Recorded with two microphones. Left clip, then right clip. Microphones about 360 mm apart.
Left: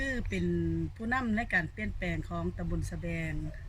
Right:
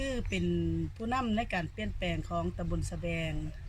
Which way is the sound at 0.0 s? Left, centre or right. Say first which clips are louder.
Even; centre.